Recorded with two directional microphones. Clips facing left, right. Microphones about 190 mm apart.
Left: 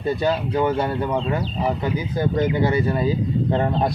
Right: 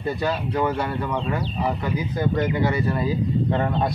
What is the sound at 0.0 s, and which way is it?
Speech, 25° left (ahead or behind).